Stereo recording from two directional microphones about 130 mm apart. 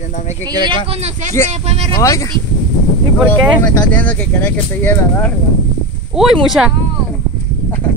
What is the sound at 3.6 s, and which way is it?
Speech, 15° left (ahead or behind).